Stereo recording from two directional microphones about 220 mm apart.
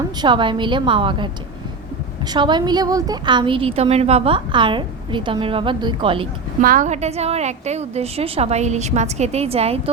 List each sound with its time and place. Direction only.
0.2 s a woman's voice: 20° right (ahead or behind)
2.3 s a woman's voice: 20° right (ahead or behind)
6.6 s a woman's voice: 40° right (ahead or behind)